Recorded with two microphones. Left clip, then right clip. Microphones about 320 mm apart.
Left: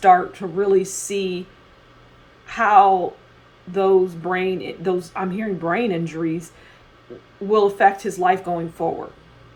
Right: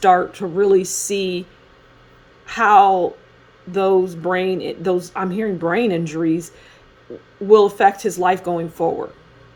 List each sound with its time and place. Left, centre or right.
0.0 s speech: right
2.5 s speech: right
7.5 s speech: right